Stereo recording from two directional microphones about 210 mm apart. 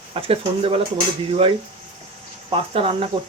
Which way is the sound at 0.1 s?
25° right (ahead or behind).